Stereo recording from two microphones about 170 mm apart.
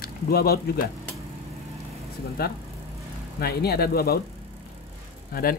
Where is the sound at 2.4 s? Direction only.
65° left (ahead or behind).